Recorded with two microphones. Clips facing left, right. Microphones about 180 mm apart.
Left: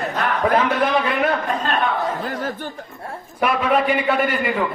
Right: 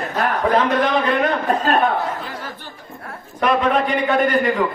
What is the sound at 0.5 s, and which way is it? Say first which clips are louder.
Speech: right 1 dB; 10° left (ahead or behind).